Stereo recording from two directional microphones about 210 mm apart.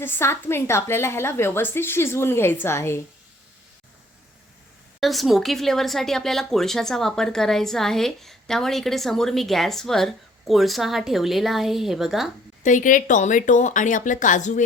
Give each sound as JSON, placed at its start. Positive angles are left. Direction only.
{"t": 0.0, "sound": "a woman's voice", "side_deg": 10}
{"t": 4.9, "sound": "speech", "side_deg": 0}
{"t": 12.6, "sound": "speech", "side_deg": 40}